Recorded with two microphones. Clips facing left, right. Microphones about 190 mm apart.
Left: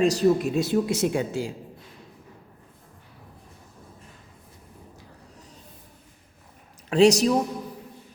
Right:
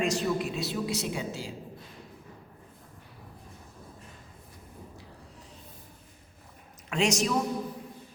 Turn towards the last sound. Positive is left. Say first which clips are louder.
# left 9 dB
turn(degrees=35)  # may be behind; listen again after turning